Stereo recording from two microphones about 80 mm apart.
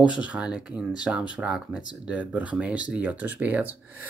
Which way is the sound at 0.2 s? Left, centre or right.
Centre.